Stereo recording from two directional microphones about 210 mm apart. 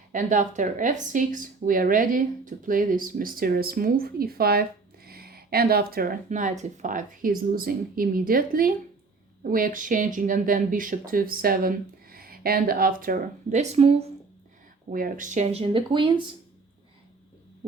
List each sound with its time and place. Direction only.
0.1 s speech: 40° right (ahead or behind)
14.9 s speech: 40° right (ahead or behind); by 16.2 s 25° right (ahead or behind)